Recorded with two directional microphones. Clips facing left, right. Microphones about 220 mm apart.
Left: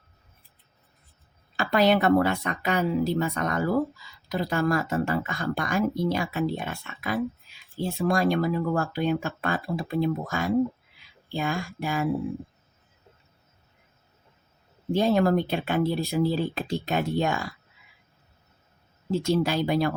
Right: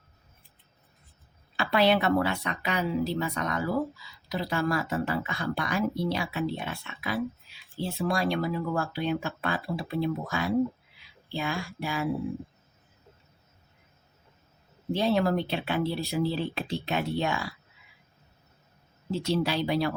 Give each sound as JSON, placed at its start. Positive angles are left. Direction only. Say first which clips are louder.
{"t": 1.5, "sound": "speech", "louder": "left 2 dB", "side_deg": 45}
{"t": 14.9, "sound": "speech", "louder": "left 4 dB", "side_deg": 45}
{"t": 19.1, "sound": "speech", "louder": "left 3 dB", "side_deg": 50}